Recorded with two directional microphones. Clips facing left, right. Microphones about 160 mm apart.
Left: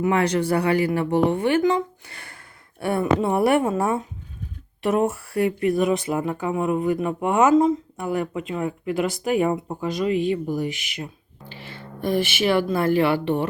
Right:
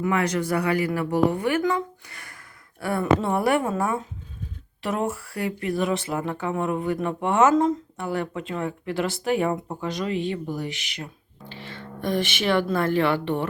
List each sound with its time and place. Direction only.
0.0 s speech: 30° left (ahead or behind); by 13.5 s 10° left (ahead or behind)